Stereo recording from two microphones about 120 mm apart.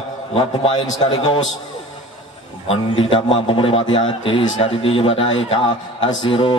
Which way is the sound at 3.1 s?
50° left (ahead or behind).